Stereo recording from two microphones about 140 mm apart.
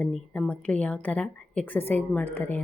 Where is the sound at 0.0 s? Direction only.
10° left (ahead or behind).